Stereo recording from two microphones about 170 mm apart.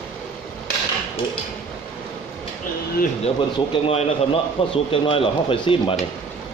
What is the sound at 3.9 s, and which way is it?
A man's voice, 35° left (ahead or behind).